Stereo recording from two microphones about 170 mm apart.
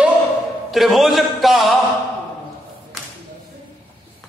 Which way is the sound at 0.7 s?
Centre (ahead or behind).